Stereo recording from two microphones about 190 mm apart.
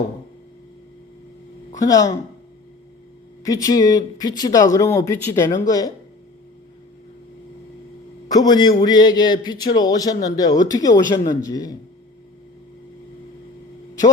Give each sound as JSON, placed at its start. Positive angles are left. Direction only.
{"t": 1.7, "sound": "speech", "side_deg": 15}
{"t": 3.4, "sound": "speech", "side_deg": 20}
{"t": 8.3, "sound": "speech", "side_deg": 20}